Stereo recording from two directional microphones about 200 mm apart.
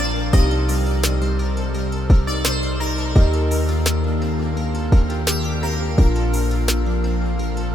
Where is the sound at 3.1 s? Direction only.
Centre (ahead or behind).